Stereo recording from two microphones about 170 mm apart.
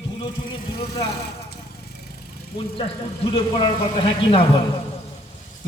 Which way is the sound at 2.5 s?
30° left (ahead or behind).